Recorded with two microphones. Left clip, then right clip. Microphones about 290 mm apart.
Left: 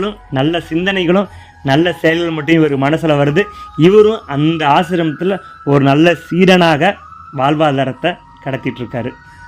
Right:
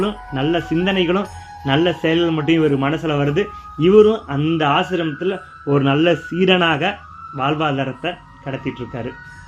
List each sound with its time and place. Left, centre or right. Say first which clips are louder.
0.0 s a man's voice: left 4 dB; left